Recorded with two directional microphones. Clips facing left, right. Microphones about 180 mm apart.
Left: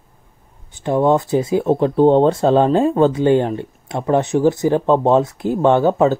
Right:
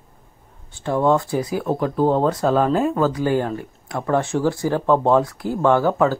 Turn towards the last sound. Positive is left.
turn(degrees=20)  # may be behind; listen again after turning